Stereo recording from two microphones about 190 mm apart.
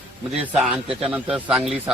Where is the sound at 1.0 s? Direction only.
5° right (ahead or behind).